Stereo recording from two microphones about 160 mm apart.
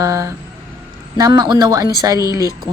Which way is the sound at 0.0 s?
20° right (ahead or behind).